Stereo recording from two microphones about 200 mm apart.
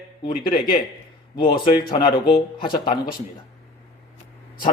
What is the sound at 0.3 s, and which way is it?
Speech, 20° left (ahead or behind).